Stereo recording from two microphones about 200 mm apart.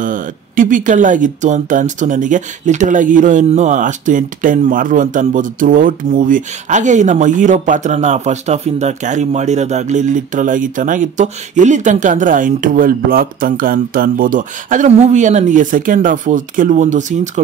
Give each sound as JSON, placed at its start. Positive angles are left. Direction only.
{"t": 0.0, "sound": "speech", "side_deg": -40}